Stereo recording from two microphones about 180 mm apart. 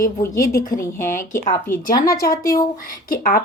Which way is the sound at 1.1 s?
45° left (ahead or behind).